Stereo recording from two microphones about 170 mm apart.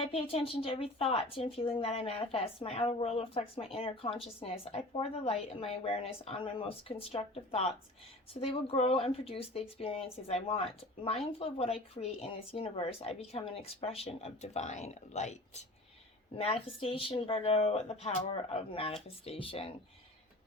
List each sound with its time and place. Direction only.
0.0 s a woman's voice: 35° left (ahead or behind)